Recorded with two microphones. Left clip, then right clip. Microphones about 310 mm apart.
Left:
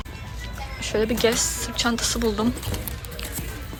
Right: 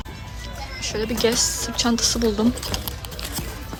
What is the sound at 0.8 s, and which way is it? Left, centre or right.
Speech, centre.